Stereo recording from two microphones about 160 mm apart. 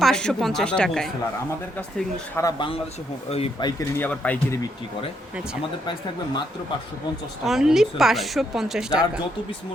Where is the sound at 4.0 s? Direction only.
10° left (ahead or behind).